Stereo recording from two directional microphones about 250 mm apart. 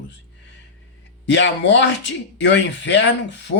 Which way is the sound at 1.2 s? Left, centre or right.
Left.